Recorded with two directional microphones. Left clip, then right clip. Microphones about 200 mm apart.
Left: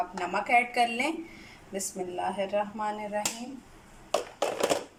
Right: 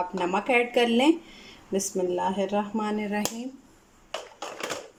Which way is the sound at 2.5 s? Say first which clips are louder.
Right 2 dB; 40° right (ahead or behind).